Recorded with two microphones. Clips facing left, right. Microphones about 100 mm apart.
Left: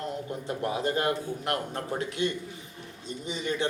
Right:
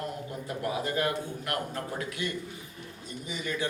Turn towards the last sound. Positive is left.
turn(degrees=25)  # may be behind; listen again after turning